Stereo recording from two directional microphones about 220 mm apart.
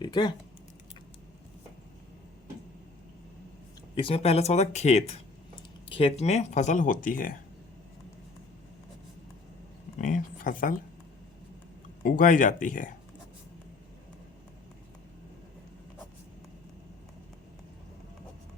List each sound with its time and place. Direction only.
0.0 s speech: 20° left (ahead or behind)
3.9 s speech: 25° left (ahead or behind)
10.0 s a sound: 40° left (ahead or behind)
12.0 s speech: 40° left (ahead or behind)